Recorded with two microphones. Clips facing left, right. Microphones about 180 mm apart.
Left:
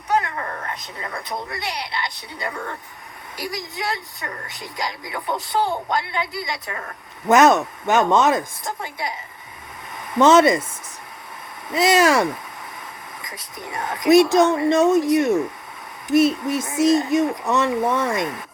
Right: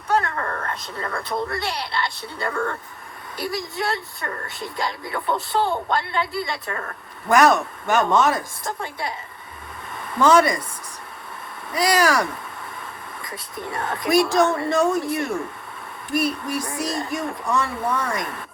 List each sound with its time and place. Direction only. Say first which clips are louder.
0.2 s speech: right 1 dB; 15° left (ahead or behind)
11.7 s speech: left 3 dB; 25° left (ahead or behind)